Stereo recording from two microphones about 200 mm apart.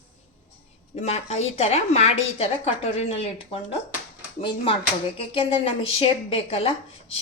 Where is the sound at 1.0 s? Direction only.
30° left (ahead or behind).